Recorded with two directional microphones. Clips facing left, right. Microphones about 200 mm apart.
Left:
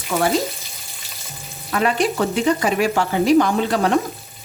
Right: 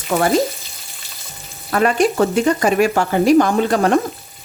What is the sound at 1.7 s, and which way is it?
Speech, 45° right (ahead or behind).